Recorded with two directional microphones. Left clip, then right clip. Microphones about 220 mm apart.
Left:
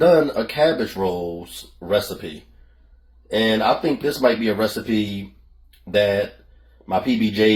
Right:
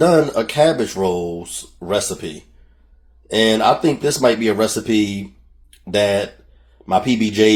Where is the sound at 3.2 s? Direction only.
30° right (ahead or behind).